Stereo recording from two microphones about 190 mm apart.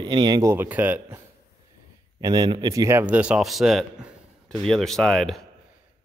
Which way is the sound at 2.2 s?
20° right (ahead or behind).